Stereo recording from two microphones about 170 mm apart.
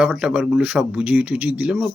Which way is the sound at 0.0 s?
5° right (ahead or behind).